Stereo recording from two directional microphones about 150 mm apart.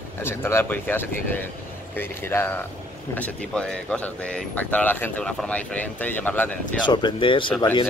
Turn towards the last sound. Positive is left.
turn(degrees=35)  # may be behind; listen again after turning